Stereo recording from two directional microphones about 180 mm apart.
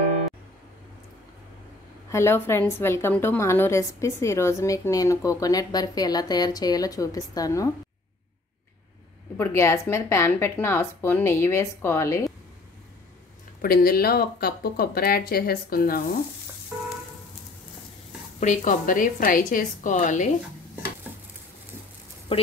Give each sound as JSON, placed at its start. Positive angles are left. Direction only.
{"t": 2.0, "sound": "a woman's voice", "side_deg": 15}
{"t": 9.4, "sound": "a woman's voice", "side_deg": 15}
{"t": 13.6, "sound": "speech", "side_deg": 55}
{"t": 18.4, "sound": "a woman's voice", "side_deg": 40}